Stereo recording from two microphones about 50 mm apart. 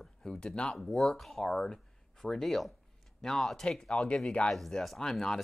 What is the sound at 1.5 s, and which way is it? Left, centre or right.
Speech, centre.